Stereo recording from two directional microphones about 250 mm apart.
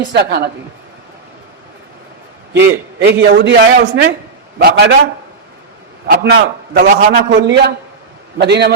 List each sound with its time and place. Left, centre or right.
0.1 s a man's voice: right
2.5 s a man's voice: right
6.1 s a man's voice: right